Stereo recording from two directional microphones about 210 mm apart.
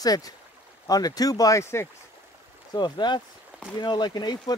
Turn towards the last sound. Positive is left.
turn(degrees=20)  # may be behind; listen again after turning